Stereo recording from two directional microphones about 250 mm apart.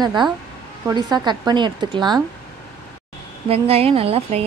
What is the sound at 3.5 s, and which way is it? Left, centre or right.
Speech, right.